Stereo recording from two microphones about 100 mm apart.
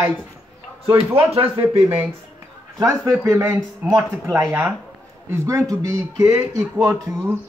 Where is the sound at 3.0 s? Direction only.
30° right (ahead or behind).